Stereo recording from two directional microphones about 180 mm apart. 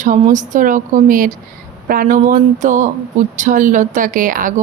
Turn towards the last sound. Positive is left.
turn(degrees=-50)  # may be behind; listen again after turning